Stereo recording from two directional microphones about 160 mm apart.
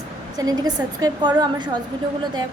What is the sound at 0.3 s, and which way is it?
A woman's voice, 25° right (ahead or behind).